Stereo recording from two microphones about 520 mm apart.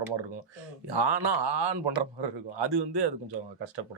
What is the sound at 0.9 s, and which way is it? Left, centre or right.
A man's voice, right.